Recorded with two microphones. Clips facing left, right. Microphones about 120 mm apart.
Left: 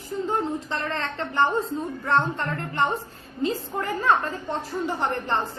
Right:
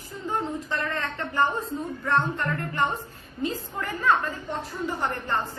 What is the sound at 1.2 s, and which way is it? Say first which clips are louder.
A woman's voice: left 3 dB; 25° left (ahead or behind).